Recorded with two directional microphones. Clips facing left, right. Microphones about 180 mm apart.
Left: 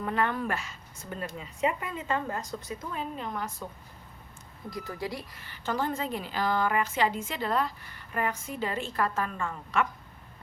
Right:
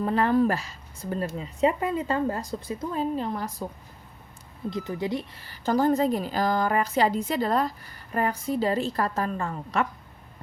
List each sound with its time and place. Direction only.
0.0 s a woman's voice: 35° right (ahead or behind)
4.7 s speech: 20° right (ahead or behind)
5.4 s a woman's voice: 40° right (ahead or behind)